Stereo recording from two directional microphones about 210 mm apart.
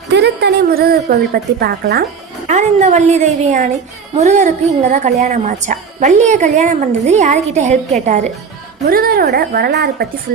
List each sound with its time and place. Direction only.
0.1 s a woman's voice: 55° right (ahead or behind)
2.5 s a woman's voice: 35° right (ahead or behind)
8.9 s speech: 45° right (ahead or behind)